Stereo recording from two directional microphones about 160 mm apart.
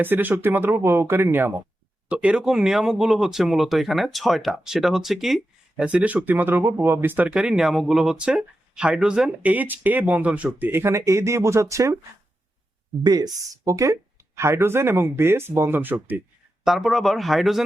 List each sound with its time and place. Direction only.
0.0 s speech: 10° right (ahead or behind)
13.0 s speech: 25° right (ahead or behind)
16.6 s speech: centre (ahead or behind)